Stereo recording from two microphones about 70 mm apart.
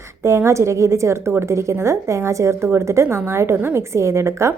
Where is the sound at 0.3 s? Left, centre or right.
Right.